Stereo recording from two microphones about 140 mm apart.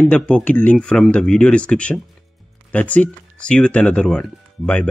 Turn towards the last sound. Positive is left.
turn(degrees=10)  # may be behind; listen again after turning